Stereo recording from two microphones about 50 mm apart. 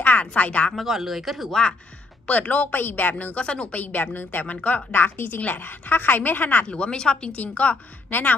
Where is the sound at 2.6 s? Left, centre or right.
Left.